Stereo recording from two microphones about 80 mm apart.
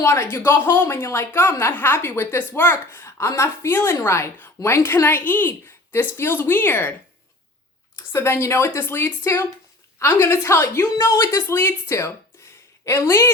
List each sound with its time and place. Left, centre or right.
0.0 s a woman's voice: left
7.9 s a woman's voice: left